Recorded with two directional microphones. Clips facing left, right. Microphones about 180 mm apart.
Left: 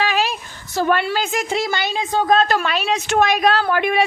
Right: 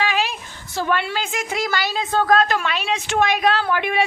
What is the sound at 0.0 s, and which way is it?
A woman's voice, 40° left (ahead or behind).